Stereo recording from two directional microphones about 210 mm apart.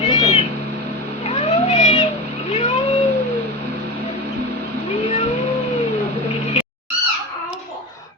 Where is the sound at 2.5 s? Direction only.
25° left (ahead or behind).